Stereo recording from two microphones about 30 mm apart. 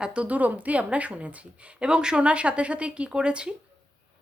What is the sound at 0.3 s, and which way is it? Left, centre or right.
A woman's voice, right.